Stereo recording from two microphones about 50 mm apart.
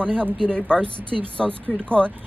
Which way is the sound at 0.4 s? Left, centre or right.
Left.